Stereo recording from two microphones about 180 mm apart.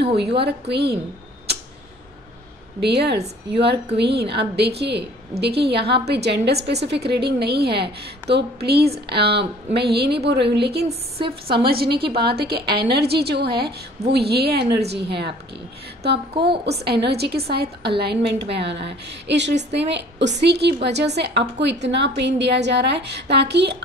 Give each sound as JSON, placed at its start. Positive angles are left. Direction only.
{"t": 0.0, "sound": "a woman's voice", "side_deg": -65}
{"t": 2.8, "sound": "a woman's voice", "side_deg": -65}
{"t": 16.4, "sound": "a woman's voice", "side_deg": -65}